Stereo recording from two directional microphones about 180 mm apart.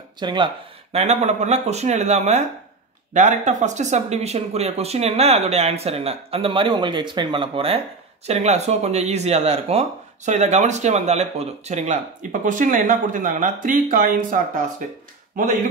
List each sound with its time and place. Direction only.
0.2 s speech: 25° right (ahead or behind)
0.9 s speech: 40° right (ahead or behind)